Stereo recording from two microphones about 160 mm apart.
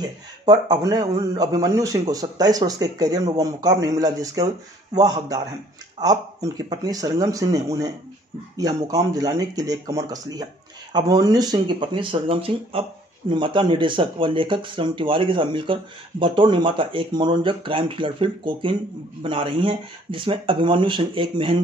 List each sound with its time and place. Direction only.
0.0 s speech: 25° right (ahead or behind)
1.5 s speech: 20° right (ahead or behind)